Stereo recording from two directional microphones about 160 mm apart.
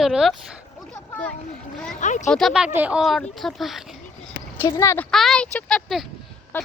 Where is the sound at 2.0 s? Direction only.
50° left (ahead or behind).